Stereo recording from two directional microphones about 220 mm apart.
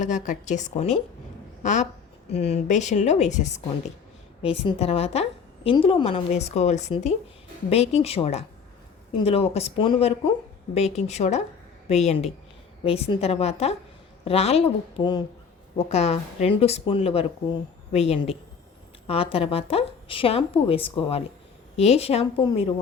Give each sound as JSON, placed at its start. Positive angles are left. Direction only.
{"t": 0.0, "sound": "a woman's voice", "side_deg": 35}